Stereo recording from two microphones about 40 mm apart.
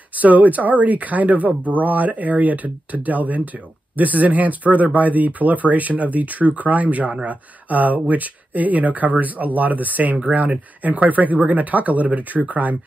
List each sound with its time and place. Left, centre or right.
0.1 s speech: right